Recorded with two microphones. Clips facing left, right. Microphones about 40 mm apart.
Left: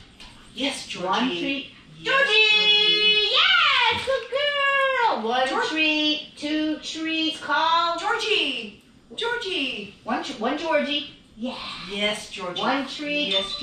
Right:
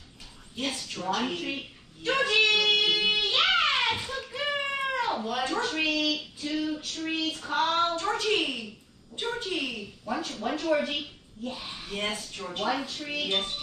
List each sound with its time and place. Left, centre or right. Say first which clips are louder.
0.6 s speech: left 5 dB; left